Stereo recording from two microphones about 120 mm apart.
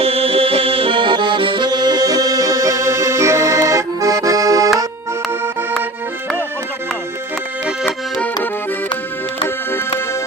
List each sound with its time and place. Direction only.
0.0 s accordion: 55° right (ahead or behind); by 4.7 s 30° right (ahead or behind)